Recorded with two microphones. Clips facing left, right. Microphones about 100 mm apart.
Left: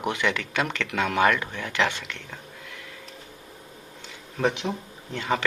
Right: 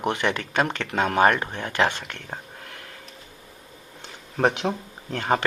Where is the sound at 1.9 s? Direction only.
45° right (ahead or behind).